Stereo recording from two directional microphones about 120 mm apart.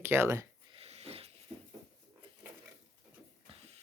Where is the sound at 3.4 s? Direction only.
60° right (ahead or behind).